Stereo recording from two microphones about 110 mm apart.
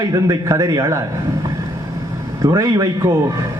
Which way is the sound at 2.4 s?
30° right (ahead or behind).